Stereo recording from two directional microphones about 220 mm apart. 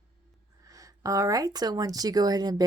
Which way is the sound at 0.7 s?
15° right (ahead or behind).